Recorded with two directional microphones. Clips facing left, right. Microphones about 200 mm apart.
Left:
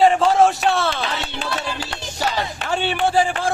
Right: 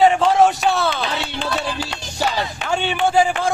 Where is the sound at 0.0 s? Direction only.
Centre (ahead or behind).